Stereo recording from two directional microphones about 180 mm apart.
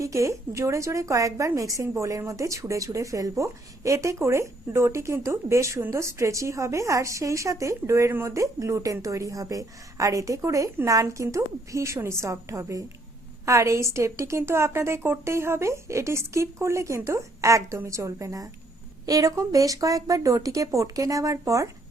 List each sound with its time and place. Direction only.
0.0 s a woman's voice: 15° right (ahead or behind)